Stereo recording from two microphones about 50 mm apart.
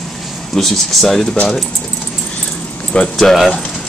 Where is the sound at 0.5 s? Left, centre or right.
Centre.